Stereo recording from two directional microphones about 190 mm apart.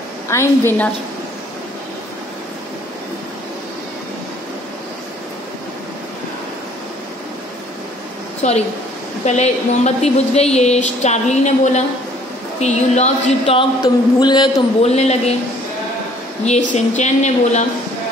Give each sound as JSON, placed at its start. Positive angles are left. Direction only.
{"t": 0.3, "sound": "a woman's voice", "side_deg": 15}
{"t": 8.4, "sound": "a woman's voice", "side_deg": 35}
{"t": 13.8, "sound": "a man's voice", "side_deg": 25}
{"t": 14.8, "sound": "a woman's voice", "side_deg": 35}
{"t": 16.4, "sound": "a woman's voice", "side_deg": 35}